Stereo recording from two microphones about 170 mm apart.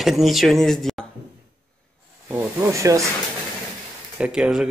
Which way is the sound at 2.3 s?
10° right (ahead or behind).